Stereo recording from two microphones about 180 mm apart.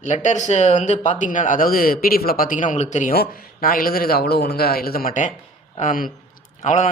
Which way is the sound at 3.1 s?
55° left (ahead or behind).